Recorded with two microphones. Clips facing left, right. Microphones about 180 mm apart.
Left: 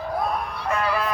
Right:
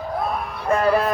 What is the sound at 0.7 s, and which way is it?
Speech, 45° right (ahead or behind).